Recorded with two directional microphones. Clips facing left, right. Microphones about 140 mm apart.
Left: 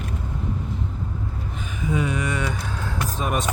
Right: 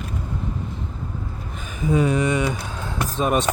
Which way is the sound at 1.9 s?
35° right (ahead or behind).